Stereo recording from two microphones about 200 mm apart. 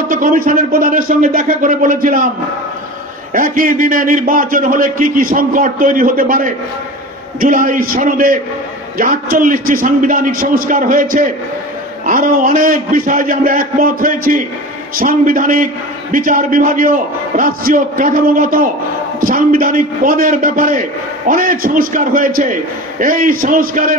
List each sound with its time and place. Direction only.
0.1 s a man's voice: 40° right (ahead or behind)
3.3 s a man's voice: 45° right (ahead or behind)